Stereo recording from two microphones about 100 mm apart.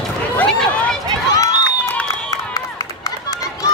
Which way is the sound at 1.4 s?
40° left (ahead or behind).